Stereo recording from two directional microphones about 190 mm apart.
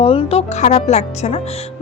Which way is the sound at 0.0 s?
30° left (ahead or behind).